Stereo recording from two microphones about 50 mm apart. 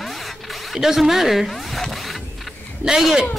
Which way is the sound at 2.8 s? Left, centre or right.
Centre.